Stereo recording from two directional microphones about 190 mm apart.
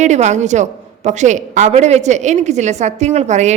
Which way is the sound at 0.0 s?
35° right (ahead or behind).